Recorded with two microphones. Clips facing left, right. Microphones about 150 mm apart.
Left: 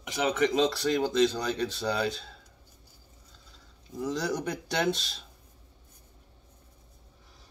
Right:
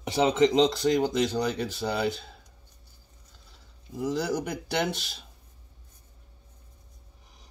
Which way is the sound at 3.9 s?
10° right (ahead or behind).